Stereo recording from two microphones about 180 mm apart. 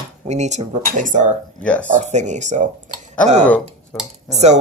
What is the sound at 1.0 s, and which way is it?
Cutlery, 45° right (ahead or behind).